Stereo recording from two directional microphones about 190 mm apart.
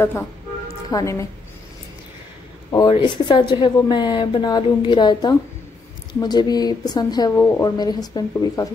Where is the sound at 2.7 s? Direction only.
20° left (ahead or behind).